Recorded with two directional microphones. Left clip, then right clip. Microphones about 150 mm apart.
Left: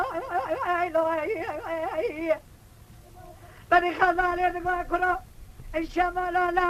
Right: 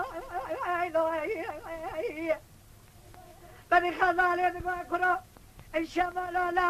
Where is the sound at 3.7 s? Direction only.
30° left (ahead or behind).